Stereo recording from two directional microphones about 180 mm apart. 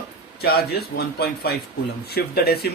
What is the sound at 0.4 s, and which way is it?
A man's voice, 60° left (ahead or behind).